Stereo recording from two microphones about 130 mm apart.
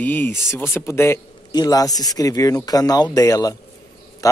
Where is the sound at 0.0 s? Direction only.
15° left (ahead or behind).